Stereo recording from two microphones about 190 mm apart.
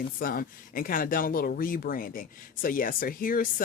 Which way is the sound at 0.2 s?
50° left (ahead or behind).